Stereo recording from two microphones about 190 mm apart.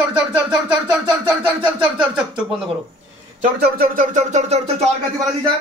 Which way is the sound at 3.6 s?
50° right (ahead or behind).